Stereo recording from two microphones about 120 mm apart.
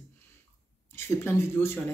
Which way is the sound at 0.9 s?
20° left (ahead or behind).